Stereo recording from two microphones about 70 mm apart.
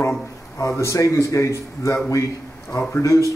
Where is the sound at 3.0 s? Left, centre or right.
Left.